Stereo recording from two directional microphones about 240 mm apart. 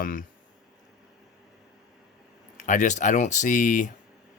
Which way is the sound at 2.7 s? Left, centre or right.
Left.